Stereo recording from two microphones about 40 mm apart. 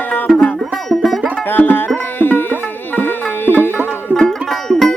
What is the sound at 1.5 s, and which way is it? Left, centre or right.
Music, left.